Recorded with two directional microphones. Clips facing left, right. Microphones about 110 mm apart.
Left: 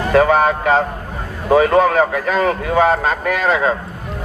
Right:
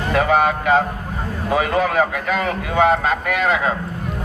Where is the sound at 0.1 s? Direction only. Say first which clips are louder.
Left 4 dB; 40° left (ahead or behind).